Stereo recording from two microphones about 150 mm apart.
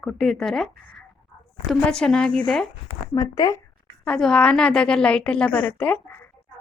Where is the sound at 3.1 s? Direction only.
25° left (ahead or behind).